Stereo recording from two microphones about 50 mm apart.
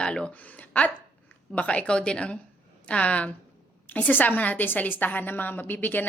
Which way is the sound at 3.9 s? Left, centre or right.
Left.